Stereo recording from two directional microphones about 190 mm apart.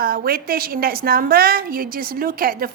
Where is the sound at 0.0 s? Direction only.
50° right (ahead or behind).